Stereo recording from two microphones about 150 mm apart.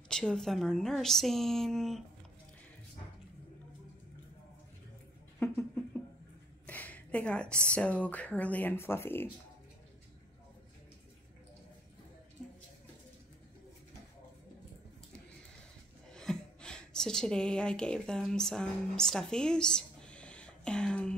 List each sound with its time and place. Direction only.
0.1 s a woman's voice: 5° left (ahead or behind)
5.4 s a sound: 10° left (ahead or behind)
6.6 s speech: 10° left (ahead or behind)
16.1 s a woman's voice: 5° left (ahead or behind)